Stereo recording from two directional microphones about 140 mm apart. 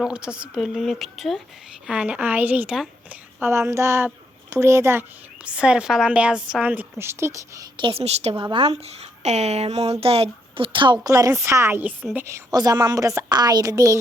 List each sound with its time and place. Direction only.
0.0 s a woman's voice: 5° right (ahead or behind)
3.4 s a woman's voice: 20° right (ahead or behind)
5.5 s a woman's voice: 5° right (ahead or behind)
7.8 s a woman's voice: 40° right (ahead or behind)
8.4 s speech: 35° right (ahead or behind)
8.7 s a woman's voice: 50° right (ahead or behind); by 14.0 s 25° right (ahead or behind)